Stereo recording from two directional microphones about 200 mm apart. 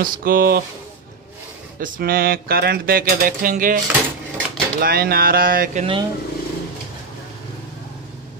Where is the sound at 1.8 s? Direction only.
45° right (ahead or behind).